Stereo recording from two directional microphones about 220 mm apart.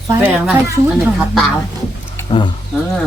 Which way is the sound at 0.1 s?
10° right (ahead or behind).